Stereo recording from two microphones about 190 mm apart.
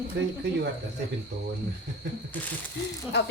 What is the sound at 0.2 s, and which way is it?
Speech, 65° right (ahead or behind).